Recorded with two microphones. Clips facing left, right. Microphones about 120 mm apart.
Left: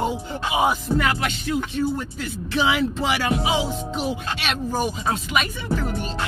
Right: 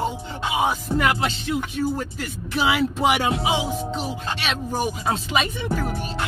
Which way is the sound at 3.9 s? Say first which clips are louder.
Left 2 dB; centre (ahead or behind).